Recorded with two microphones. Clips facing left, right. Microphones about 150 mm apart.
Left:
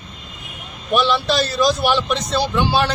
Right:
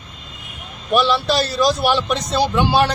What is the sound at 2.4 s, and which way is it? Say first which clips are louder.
Speech: right 4 dB; 45° right (ahead or behind).